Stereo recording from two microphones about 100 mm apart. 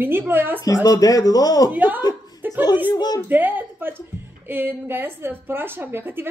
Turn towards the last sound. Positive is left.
turn(degrees=-20)  # may be behind; listen again after turning